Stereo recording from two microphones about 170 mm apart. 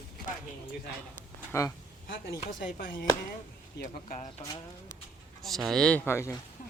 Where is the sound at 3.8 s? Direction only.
50° left (ahead or behind).